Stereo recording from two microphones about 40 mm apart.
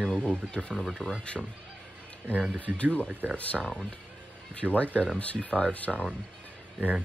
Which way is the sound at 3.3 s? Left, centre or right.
Left.